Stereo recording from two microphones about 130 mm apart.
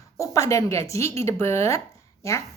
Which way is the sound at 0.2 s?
25° left (ahead or behind).